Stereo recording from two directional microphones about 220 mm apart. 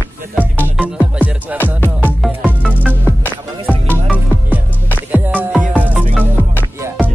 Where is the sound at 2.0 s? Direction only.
5° left (ahead or behind).